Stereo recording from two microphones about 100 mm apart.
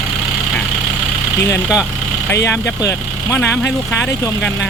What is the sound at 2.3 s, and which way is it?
Speech, 25° left (ahead or behind).